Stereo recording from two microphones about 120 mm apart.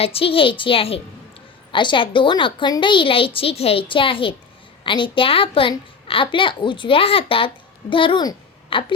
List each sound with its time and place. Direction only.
0.0 s a woman's voice: 50° left (ahead or behind)
1.7 s a woman's voice: 40° left (ahead or behind)